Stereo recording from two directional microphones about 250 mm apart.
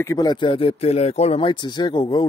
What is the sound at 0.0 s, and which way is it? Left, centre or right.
Speech, centre.